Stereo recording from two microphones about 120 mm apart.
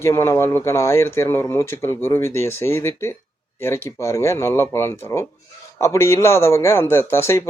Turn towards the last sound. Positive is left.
turn(degrees=20)  # may be behind; listen again after turning